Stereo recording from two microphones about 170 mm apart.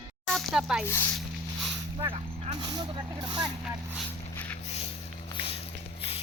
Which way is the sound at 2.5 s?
25° right (ahead or behind).